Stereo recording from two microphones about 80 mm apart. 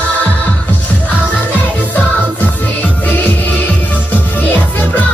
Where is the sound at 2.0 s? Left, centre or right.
Left.